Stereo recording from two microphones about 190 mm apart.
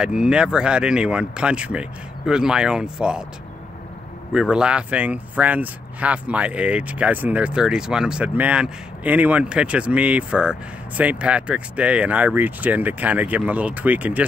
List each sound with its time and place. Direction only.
0.0 s speech: 5° right (ahead or behind)
4.3 s speech: 5° right (ahead or behind)